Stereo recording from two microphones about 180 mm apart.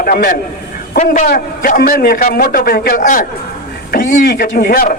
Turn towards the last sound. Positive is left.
turn(degrees=50)  # may be behind; listen again after turning